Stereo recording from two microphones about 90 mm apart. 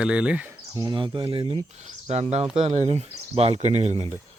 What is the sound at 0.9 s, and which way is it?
Speech, 65° right (ahead or behind).